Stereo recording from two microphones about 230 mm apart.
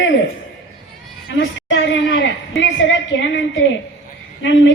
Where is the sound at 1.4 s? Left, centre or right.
Left.